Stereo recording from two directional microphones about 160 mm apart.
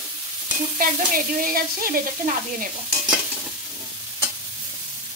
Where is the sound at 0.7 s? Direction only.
60° right (ahead or behind).